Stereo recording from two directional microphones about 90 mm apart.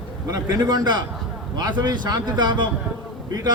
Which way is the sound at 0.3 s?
45° right (ahead or behind).